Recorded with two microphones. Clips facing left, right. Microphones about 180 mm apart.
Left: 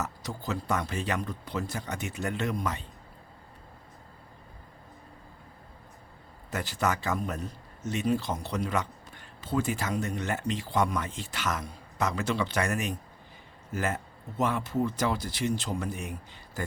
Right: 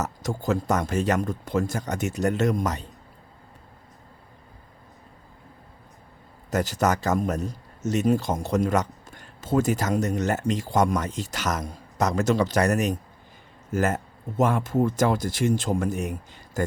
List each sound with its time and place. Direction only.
0.0 s speech: 45° right (ahead or behind)
6.5 s speech: 40° right (ahead or behind)